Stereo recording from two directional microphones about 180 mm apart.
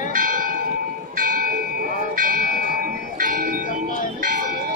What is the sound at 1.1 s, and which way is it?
Bell, 50° right (ahead or behind).